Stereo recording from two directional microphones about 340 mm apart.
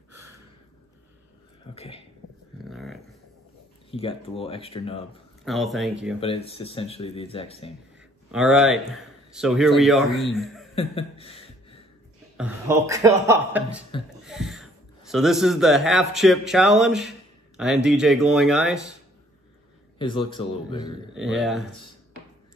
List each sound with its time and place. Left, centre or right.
2.7 s dog: centre
3.9 s speech: centre
5.4 s a man's voice: centre
6.1 s speech: centre
8.3 s a man's voice: centre
10.7 s a sound: centre
12.4 s a man's voice: centre
20.0 s speech: centre
21.2 s a man's voice: centre